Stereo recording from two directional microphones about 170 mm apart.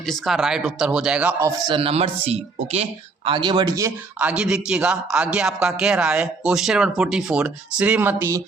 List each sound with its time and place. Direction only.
0.0 s speech: centre (ahead or behind); by 3.9 s 20° right (ahead or behind)
4.2 s a man's voice: 5° right (ahead or behind)